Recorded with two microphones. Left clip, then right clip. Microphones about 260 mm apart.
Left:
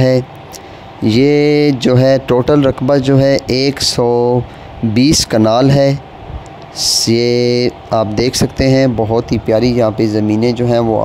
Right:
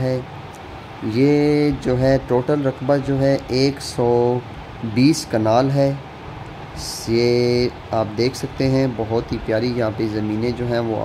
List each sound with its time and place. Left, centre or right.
1.0 s speech: left